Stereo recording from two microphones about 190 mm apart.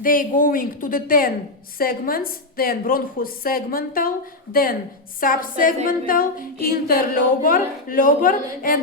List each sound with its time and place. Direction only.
0.0 s music: 45° left (ahead or behind)